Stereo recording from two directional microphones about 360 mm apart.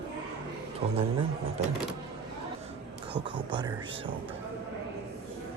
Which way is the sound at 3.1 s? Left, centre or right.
Centre.